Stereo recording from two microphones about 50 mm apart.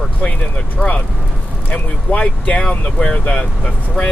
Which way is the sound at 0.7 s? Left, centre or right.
Left.